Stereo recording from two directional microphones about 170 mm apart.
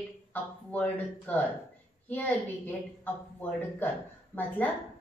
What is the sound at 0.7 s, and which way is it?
A woman's voice, 10° left (ahead or behind).